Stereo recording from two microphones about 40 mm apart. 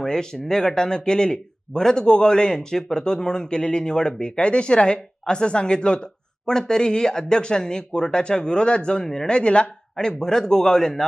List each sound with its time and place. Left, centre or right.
0.0 s speech: centre